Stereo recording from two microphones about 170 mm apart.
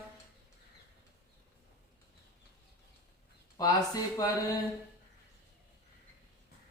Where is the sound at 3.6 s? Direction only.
20° left (ahead or behind).